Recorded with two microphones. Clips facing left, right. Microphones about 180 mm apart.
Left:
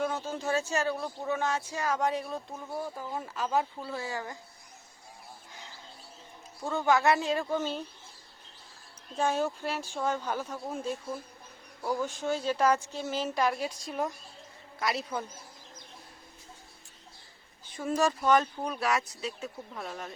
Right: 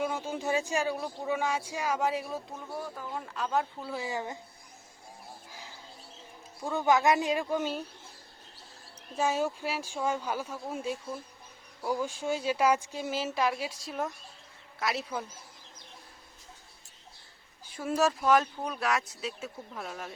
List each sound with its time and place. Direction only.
0.0 s speech: 10° right (ahead or behind)
3.0 s speech: 10° left (ahead or behind)
3.9 s speech: 20° right (ahead or behind)
6.7 s speech: 15° right (ahead or behind)
9.1 s speech: 5° right (ahead or behind)
17.7 s speech: 5° right (ahead or behind)